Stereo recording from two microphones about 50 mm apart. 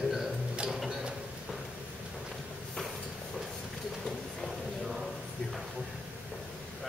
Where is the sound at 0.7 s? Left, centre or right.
Centre.